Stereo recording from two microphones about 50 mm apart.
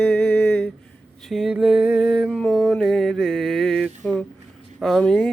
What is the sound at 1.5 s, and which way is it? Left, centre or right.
Music, centre.